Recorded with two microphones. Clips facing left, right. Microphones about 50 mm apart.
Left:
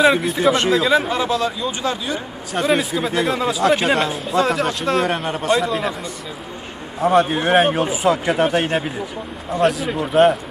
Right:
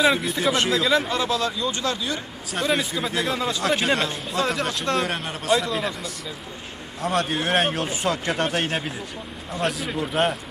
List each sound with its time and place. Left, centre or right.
0.0 s speech: centre
0.8 s speech: centre
5.0 s speech: centre
5.6 s speech: centre
7.0 s a man's voice: centre